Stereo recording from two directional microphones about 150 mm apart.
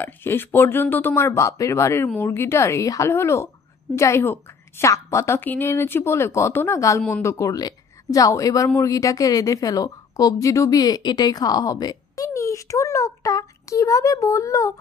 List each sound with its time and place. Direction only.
0.0 s a woman's voice: 15° left (ahead or behind)